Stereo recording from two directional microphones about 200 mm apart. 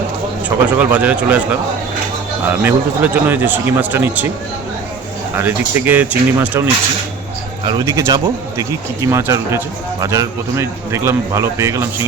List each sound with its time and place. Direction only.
0.4 s a man's voice: 5° right (ahead or behind)
2.4 s a man's voice: 10° right (ahead or behind)
5.4 s a man's voice: 10° right (ahead or behind)
7.6 s a man's voice: 20° right (ahead or behind)